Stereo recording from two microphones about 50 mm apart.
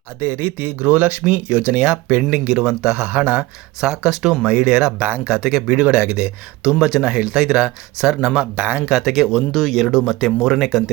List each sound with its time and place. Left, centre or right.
0.2 s speech: right
2.5 s speech: centre
3.1 s speech: right
3.8 s speech: centre
4.4 s speech: centre
5.3 s speech: centre
5.7 s speech: right
6.7 s speech: centre
8.4 s speech: right
8.9 s speech: centre